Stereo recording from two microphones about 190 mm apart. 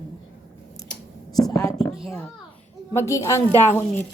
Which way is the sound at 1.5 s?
20° left (ahead or behind).